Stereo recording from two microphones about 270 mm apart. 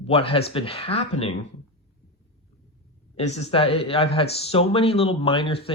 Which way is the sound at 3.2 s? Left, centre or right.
Left.